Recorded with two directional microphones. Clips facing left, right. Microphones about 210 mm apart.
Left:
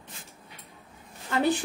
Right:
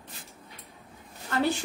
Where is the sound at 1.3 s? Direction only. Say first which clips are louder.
Left 2 dB; 15° left (ahead or behind).